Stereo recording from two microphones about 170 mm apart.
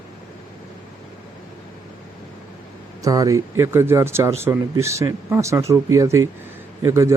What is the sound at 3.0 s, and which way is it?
Speech, 20° right (ahead or behind).